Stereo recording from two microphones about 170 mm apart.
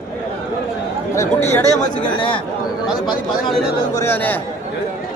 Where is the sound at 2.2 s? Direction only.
30° left (ahead or behind).